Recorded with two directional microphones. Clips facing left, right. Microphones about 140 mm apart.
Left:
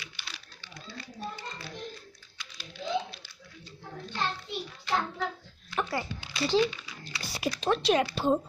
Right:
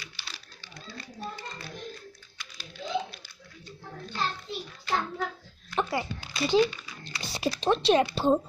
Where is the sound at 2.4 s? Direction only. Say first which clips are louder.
Left 1 dB; 50° right (ahead or behind).